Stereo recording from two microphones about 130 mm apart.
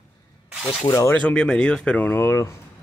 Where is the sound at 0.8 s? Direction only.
25° left (ahead or behind).